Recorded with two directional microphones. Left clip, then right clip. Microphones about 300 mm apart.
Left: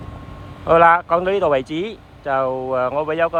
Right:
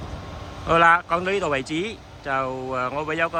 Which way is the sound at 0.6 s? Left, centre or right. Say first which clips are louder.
Left 4 dB; centre.